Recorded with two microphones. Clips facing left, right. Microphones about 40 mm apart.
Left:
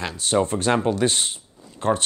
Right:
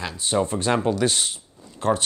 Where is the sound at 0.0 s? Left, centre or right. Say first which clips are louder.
Left 2 dB; left.